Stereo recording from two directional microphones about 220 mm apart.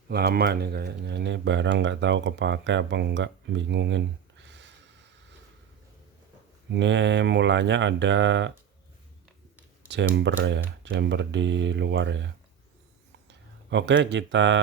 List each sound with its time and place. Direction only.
0.1 s speech: 45° right (ahead or behind)
6.7 s speech: 55° right (ahead or behind)
9.9 s speech: 55° right (ahead or behind)